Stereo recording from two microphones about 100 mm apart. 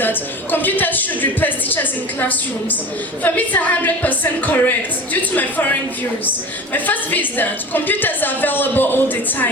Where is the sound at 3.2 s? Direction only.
20° left (ahead or behind).